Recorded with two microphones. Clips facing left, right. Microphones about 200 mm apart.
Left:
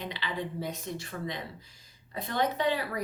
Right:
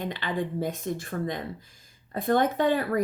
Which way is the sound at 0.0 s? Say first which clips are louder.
Right 5 dB; 50° right (ahead or behind).